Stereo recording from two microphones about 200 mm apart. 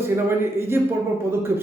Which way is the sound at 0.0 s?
10° right (ahead or behind).